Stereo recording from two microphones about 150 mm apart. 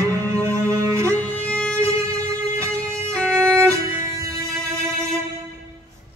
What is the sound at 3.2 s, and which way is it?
Violin, 5° left (ahead or behind).